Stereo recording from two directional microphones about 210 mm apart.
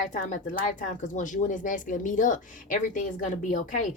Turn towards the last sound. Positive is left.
turn(degrees=35)  # may be behind; listen again after turning